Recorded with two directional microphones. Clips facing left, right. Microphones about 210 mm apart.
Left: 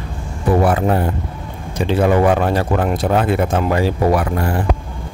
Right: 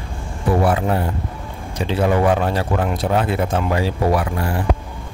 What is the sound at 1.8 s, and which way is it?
Speech, 55° left (ahead or behind).